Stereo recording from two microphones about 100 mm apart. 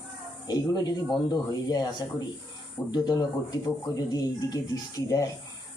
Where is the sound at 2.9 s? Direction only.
40° left (ahead or behind).